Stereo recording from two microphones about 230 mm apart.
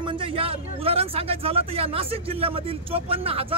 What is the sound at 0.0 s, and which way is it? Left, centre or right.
Speech, right.